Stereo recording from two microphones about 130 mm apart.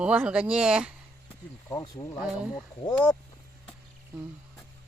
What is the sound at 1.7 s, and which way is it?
Speech, 30° left (ahead or behind).